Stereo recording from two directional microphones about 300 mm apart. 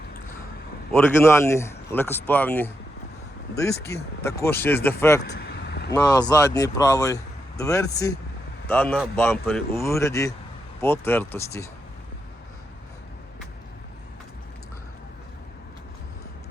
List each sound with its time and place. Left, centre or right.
1.2 s speech: centre
5.3 s vehicle: left
5.9 s speech: centre